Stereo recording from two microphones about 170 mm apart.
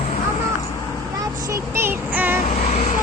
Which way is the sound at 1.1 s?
20° right (ahead or behind).